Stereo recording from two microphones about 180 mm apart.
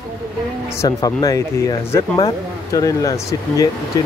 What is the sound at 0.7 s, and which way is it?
Speech, 15° left (ahead or behind).